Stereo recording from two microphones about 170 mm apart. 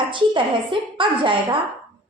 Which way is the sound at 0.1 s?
30° right (ahead or behind).